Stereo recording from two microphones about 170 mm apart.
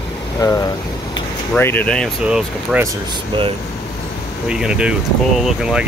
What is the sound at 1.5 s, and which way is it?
Speech, 10° left (ahead or behind).